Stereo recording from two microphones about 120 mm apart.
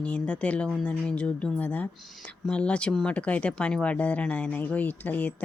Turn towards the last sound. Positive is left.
turn(degrees=15)  # may be behind; listen again after turning